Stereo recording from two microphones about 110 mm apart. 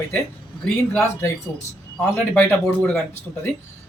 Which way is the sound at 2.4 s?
15° left (ahead or behind).